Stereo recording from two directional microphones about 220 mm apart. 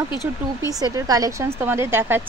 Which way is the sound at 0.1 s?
15° left (ahead or behind).